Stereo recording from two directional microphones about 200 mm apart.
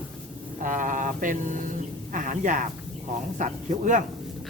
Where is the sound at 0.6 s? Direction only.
40° right (ahead or behind).